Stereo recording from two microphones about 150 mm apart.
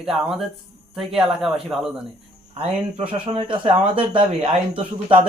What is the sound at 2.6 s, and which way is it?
Speech, 35° right (ahead or behind).